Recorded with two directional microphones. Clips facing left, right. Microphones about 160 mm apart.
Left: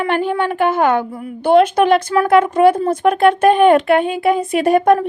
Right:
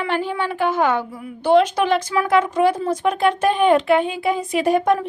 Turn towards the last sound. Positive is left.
turn(degrees=55)  # may be behind; listen again after turning